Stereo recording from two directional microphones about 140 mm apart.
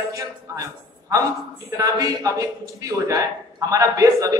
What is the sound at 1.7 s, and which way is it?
A man's voice, 25° right (ahead or behind).